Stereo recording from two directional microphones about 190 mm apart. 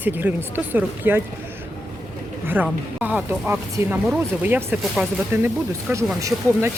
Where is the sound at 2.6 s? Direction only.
10° right (ahead or behind).